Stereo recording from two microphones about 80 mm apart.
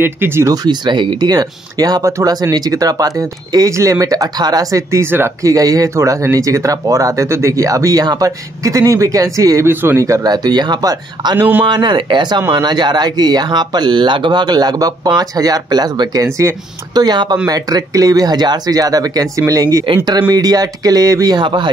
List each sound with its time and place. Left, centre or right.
0.0 s speech: right
0.5 s speech: right
5.0 s speech: right
5.4 s speech: right
9.7 s speech: right
10.0 s speech: right
11.3 s speech: right
11.6 s speech: right
16.3 s speech: right
16.9 s speech: right
21.4 s speech: right